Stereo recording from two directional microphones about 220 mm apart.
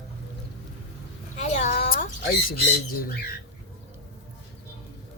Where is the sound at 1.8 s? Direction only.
45° left (ahead or behind).